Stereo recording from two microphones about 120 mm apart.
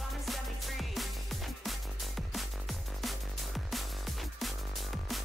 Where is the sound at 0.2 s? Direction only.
Centre (ahead or behind).